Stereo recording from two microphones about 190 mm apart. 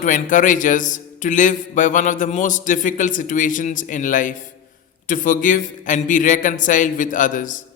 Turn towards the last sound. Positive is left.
turn(degrees=45)  # may be behind; listen again after turning